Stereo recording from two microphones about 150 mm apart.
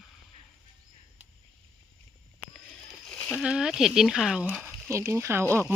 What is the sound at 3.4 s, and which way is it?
Speech, 5° right (ahead or behind).